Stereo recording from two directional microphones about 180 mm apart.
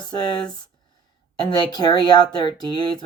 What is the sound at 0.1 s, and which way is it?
Speech, 25° left (ahead or behind).